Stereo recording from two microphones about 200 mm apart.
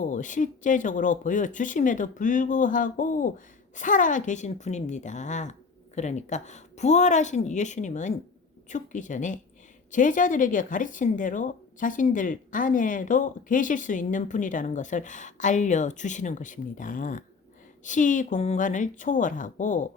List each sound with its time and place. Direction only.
0.0 s speech: 40° left (ahead or behind)